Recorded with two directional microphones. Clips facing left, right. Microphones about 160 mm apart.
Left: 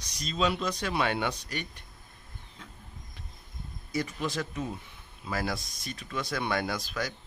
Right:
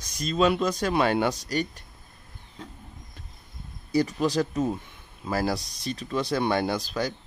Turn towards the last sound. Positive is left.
turn(degrees=-30)  # may be behind; listen again after turning